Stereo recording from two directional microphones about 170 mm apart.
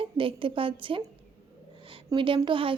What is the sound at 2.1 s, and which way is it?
Speech, 30° right (ahead or behind).